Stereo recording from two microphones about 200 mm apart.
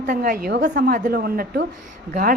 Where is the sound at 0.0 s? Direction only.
45° right (ahead or behind).